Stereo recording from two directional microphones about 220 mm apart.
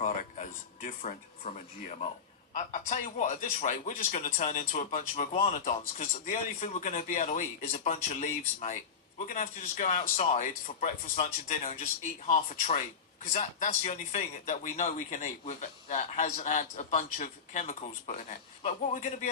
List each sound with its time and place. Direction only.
0.8 s a man's voice: 30° left (ahead or behind)